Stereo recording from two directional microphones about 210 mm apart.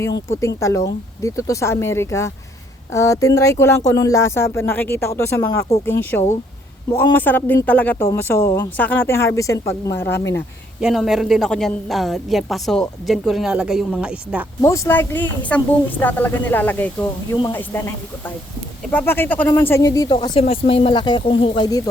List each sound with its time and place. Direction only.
0.0 s speech: 15° left (ahead or behind)
10.8 s a woman's voice: centre (ahead or behind)
14.6 s speech: 10° left (ahead or behind)